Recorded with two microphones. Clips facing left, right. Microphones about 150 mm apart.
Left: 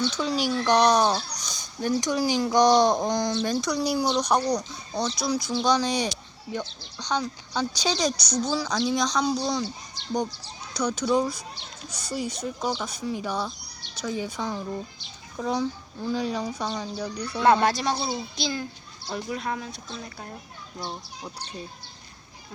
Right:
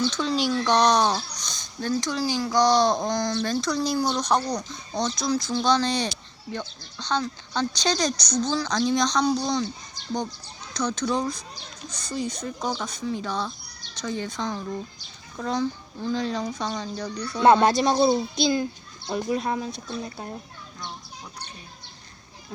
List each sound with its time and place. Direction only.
0.1 s speech: 10° left (ahead or behind)
10.8 s speech: 10° left (ahead or behind)
17.4 s speech: 25° right (ahead or behind)
17.9 s a child's voice: 45° right (ahead or behind)
19.3 s speech: 25° right (ahead or behind)